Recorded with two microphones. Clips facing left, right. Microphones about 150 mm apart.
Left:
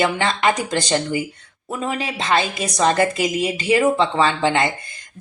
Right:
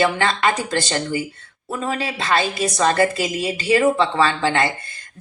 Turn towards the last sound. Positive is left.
turn(degrees=20)  # may be behind; listen again after turning